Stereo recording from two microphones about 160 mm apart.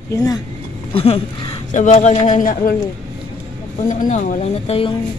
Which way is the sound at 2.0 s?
50° left (ahead or behind).